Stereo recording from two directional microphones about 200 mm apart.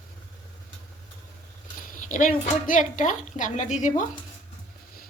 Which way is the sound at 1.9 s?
40° left (ahead or behind).